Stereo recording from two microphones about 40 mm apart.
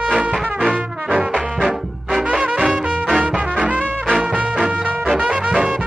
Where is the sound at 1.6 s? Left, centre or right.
Right.